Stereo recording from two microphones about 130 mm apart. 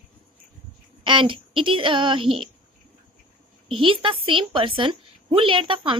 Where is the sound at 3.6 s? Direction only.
45° right (ahead or behind).